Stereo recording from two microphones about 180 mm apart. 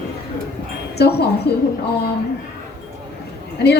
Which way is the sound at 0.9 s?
65° left (ahead or behind).